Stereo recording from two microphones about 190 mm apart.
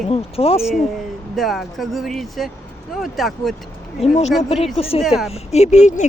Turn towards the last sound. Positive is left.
turn(degrees=40)  # may be behind; listen again after turning